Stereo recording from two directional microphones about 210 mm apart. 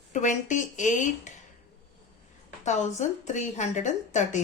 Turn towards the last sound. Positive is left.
turn(degrees=35)  # may be behind; listen again after turning